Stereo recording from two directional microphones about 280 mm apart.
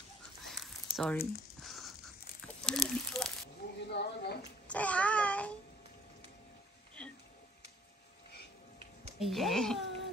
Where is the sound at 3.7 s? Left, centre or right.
Left.